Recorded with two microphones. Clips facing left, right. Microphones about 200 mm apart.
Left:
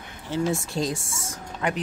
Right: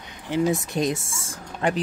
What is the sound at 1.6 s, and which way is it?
Speech, 30° right (ahead or behind).